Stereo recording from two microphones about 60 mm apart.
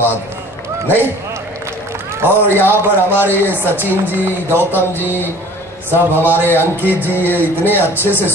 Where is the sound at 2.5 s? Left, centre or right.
Right.